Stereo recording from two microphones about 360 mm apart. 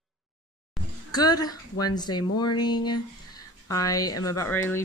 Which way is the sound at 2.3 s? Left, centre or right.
Left.